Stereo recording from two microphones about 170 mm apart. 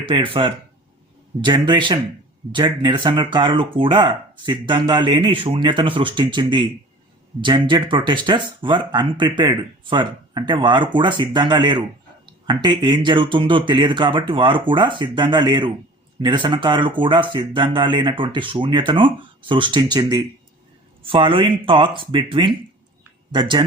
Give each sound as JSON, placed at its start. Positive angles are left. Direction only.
{"t": 0.0, "sound": "speech", "side_deg": -30}
{"t": 21.0, "sound": "speech", "side_deg": -30}